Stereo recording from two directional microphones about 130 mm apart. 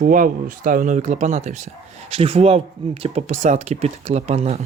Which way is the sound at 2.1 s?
45° right (ahead or behind).